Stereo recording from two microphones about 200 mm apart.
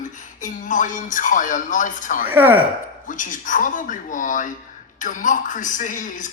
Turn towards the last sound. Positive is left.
turn(degrees=40)  # may be behind; listen again after turning